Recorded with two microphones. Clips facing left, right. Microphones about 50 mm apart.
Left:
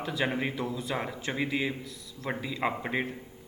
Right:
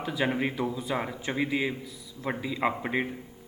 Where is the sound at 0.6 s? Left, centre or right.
Centre.